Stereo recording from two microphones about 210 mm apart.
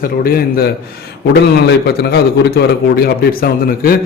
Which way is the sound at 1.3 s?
50° left (ahead or behind).